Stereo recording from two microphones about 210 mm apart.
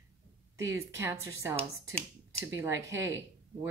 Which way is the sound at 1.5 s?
5° left (ahead or behind).